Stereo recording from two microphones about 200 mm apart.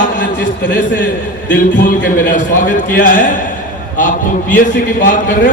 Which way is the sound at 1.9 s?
40° left (ahead or behind).